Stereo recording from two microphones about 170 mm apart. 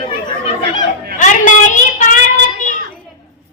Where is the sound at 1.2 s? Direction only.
50° left (ahead or behind).